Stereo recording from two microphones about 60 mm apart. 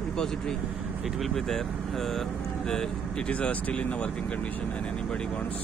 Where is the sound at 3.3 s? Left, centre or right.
Left.